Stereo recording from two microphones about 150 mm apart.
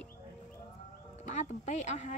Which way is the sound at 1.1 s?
55° left (ahead or behind).